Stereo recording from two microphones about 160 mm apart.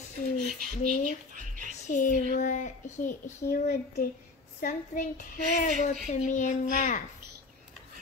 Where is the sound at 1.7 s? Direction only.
55° left (ahead or behind).